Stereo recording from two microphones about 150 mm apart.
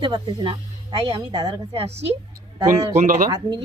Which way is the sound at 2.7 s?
55° right (ahead or behind).